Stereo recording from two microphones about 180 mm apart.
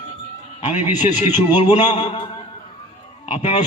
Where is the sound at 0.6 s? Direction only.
35° left (ahead or behind).